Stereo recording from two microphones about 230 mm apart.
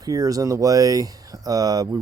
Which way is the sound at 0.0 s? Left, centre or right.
Centre.